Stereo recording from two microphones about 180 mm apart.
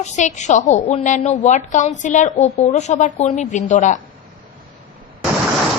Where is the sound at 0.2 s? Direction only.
40° left (ahead or behind).